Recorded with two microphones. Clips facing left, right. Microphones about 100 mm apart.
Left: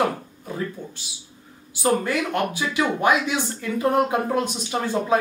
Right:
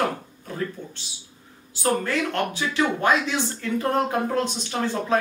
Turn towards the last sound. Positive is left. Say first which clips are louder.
# left 2 dB
turn(degrees=10)  # may be behind; listen again after turning